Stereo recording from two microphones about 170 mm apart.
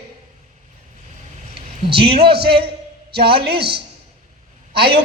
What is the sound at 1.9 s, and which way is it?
Speech, 30° right (ahead or behind).